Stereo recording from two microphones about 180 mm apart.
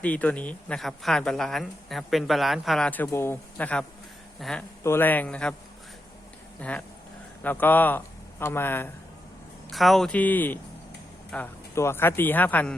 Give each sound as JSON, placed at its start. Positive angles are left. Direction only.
{"t": 0.0, "sound": "speech", "side_deg": 10}
{"t": 4.8, "sound": "speech", "side_deg": 15}
{"t": 6.6, "sound": "a man's voice", "side_deg": 5}
{"t": 9.7, "sound": "speech", "side_deg": 0}